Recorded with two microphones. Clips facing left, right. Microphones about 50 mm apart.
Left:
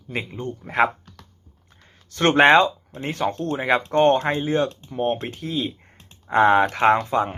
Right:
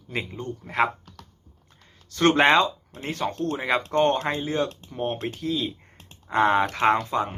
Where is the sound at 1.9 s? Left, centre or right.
Left.